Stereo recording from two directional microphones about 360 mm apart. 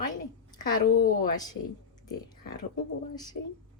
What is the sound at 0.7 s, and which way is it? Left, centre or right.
Speech, left.